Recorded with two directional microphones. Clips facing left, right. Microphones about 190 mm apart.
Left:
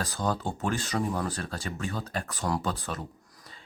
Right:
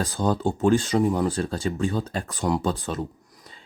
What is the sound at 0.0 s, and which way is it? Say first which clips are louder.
Speech: right 6 dB; 30° right (ahead or behind).